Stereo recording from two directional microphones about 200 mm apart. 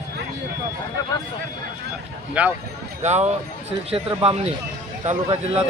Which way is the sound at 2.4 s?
5° right (ahead or behind).